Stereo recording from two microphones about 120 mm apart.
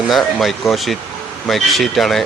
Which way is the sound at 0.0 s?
Centre (ahead or behind).